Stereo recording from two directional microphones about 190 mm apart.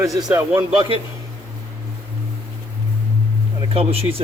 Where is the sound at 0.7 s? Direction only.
30° right (ahead or behind).